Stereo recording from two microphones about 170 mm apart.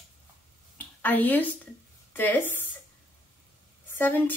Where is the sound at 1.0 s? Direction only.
10° left (ahead or behind).